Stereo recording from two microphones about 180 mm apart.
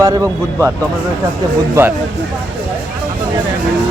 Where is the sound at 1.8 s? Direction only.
15° right (ahead or behind).